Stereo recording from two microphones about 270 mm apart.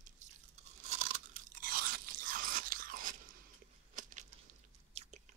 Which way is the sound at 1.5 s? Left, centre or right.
Right.